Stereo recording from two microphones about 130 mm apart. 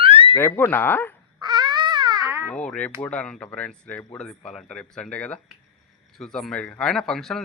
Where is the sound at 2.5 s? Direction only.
10° left (ahead or behind).